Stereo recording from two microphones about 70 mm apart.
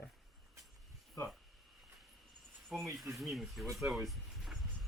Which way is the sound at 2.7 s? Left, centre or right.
Centre.